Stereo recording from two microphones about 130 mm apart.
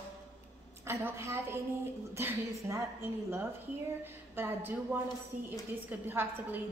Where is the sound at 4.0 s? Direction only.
15° right (ahead or behind).